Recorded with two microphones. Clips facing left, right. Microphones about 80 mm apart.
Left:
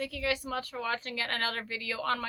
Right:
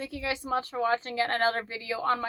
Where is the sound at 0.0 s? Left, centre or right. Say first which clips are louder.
Even; right.